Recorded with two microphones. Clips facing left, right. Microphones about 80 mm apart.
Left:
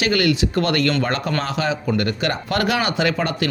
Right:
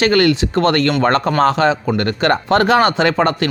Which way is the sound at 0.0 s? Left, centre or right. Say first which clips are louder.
Right 5 dB; right.